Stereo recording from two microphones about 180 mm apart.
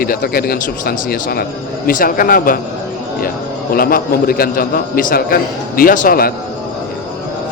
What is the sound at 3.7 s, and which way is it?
A man's voice, 55° left (ahead or behind).